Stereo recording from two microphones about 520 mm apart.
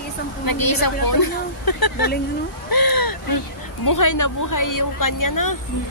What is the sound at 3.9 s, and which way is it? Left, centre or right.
Speech, left.